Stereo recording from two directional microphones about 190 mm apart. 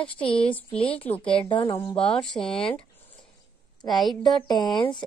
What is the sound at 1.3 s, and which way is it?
Speech, 25° left (ahead or behind).